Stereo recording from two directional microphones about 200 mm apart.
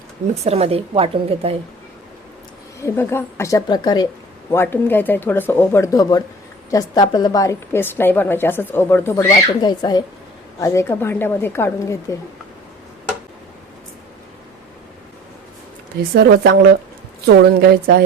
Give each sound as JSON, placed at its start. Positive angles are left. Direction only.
{"t": 0.4, "sound": "a woman's voice", "side_deg": -30}
{"t": 2.8, "sound": "a woman's voice", "side_deg": 10}
{"t": 16.1, "sound": "a woman's voice", "side_deg": -50}